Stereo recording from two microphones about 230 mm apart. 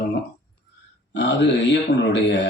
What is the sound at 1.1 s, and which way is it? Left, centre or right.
Speech, left.